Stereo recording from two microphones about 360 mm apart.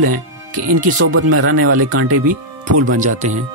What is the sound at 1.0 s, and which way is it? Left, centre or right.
Speech, right.